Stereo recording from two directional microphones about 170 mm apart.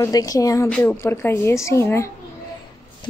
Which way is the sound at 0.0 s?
20° left (ahead or behind).